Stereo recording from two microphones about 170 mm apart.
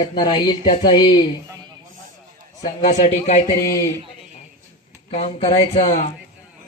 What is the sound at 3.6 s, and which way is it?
Speech, 20° left (ahead or behind).